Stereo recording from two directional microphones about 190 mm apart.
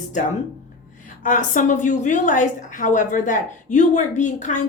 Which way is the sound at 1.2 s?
45° left (ahead or behind).